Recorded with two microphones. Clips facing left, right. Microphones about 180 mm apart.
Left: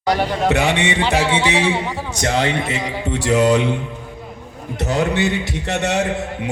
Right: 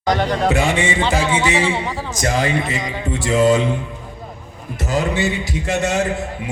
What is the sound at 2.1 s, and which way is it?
Music, 70° left (ahead or behind).